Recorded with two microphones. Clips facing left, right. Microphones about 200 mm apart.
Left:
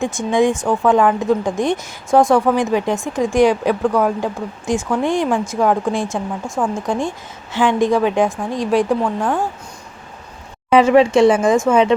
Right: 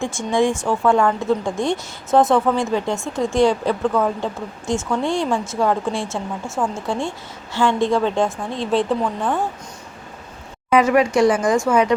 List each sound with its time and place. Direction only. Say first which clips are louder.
0.0 s speech: left 3 dB; 20° left (ahead or behind)
10.7 s speech: left 4 dB; 30° left (ahead or behind)